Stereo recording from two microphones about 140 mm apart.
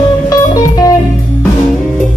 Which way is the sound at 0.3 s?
25° left (ahead or behind).